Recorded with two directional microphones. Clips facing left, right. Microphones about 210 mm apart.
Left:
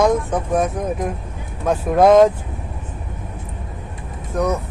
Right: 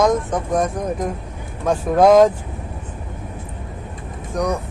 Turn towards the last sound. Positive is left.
turn(degrees=5)  # may be behind; listen again after turning